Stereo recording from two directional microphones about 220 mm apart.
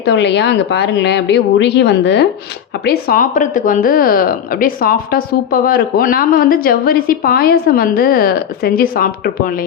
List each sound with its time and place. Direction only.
0.0 s speech: 50° left (ahead or behind)
2.8 s speech: 40° left (ahead or behind)